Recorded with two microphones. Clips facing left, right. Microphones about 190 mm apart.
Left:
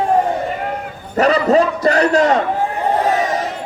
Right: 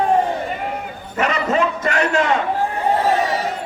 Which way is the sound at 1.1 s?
35° left (ahead or behind).